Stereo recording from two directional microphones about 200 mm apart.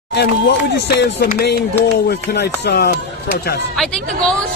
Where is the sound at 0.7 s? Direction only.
55° left (ahead or behind).